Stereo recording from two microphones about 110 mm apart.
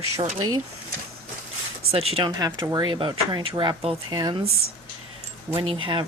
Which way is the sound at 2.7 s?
45° right (ahead or behind).